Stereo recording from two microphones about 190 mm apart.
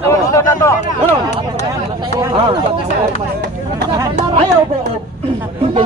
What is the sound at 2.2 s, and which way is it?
Speech, 25° right (ahead or behind).